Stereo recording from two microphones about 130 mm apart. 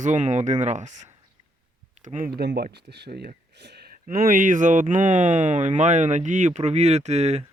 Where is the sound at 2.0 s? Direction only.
80° right.